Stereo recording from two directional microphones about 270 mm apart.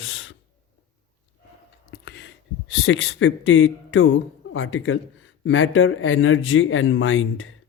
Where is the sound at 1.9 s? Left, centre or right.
Left.